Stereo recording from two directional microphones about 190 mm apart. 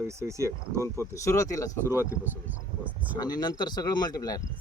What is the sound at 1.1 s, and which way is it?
Speech, 15° left (ahead or behind).